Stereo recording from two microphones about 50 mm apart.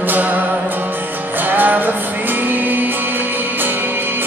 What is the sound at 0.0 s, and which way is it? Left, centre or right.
Music, right.